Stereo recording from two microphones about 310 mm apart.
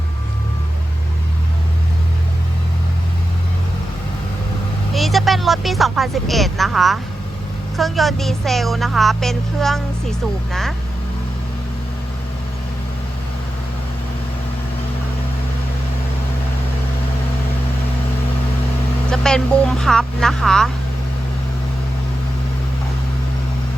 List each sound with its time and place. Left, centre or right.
4.9 s a woman's voice: centre
19.1 s a woman's voice: centre